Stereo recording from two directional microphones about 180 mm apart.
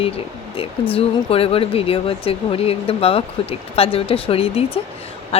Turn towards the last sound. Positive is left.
turn(degrees=35)  # may be behind; listen again after turning